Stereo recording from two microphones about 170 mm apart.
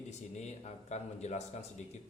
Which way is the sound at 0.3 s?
40° left (ahead or behind).